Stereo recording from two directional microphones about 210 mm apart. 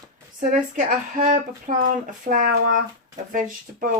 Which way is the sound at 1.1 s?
40° right (ahead or behind).